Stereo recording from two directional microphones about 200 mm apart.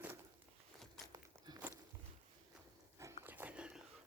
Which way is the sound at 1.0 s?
20° right (ahead or behind).